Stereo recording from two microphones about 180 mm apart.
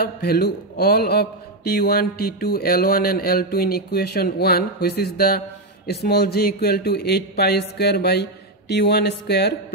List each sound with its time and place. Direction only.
0.0 s a man's voice: 60° left (ahead or behind)